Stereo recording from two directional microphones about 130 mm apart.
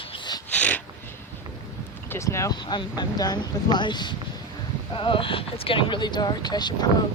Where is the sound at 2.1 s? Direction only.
20° left (ahead or behind).